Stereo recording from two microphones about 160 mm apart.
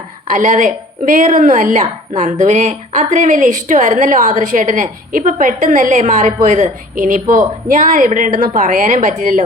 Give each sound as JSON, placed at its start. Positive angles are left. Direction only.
{"t": 0.3, "sound": "speech", "side_deg": -55}